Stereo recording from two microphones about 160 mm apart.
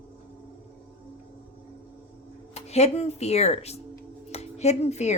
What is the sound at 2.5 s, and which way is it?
Speech, 40° left (ahead or behind).